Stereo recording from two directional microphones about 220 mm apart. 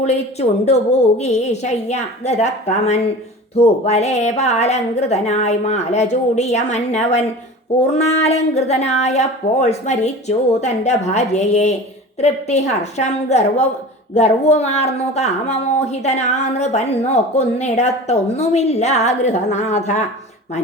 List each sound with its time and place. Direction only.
0.0 s speech: 30° left (ahead or behind)